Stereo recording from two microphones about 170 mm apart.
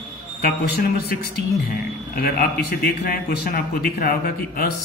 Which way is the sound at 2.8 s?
60° left (ahead or behind).